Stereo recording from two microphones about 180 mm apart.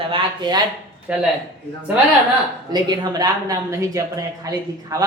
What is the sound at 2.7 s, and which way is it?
Speech, 20° right (ahead or behind).